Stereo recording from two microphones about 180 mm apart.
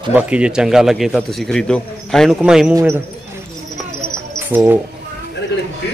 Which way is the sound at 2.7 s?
15° right (ahead or behind).